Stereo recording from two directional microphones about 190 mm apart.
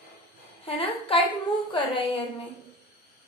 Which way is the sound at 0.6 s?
30° left (ahead or behind).